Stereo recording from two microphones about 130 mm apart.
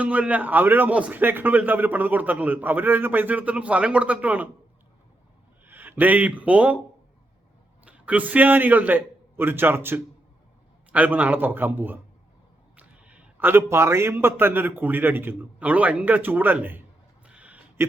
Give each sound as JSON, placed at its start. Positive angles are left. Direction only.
{"t": 0.0, "sound": "a man's voice", "side_deg": -10}
{"t": 5.6, "sound": "speech", "side_deg": -15}
{"t": 7.9, "sound": "a man's voice", "side_deg": -10}
{"t": 17.2, "sound": "a sound", "side_deg": -10}